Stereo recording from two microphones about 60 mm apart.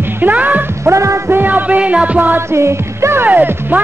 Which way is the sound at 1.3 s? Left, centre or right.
Right.